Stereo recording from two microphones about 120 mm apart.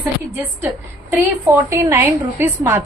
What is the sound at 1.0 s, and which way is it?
A woman's voice, 15° right (ahead or behind).